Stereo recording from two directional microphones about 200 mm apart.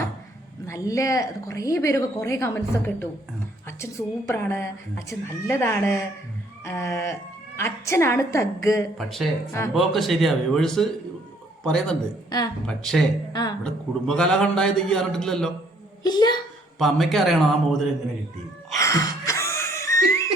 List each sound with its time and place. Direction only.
0.6 s a woman's voice: 15° left (ahead or behind)
9.0 s a man's voice: centre (ahead or behind)
13.3 s a woman's voice: 20° left (ahead or behind)
13.7 s a man's voice: 5° left (ahead or behind)
16.0 s a woman's voice: 20° left (ahead or behind)
16.7 s a man's voice: centre (ahead or behind)
18.8 s wheeze: 15° left (ahead or behind)